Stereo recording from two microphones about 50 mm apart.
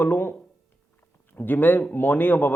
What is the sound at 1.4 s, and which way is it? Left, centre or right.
A man's voice, left.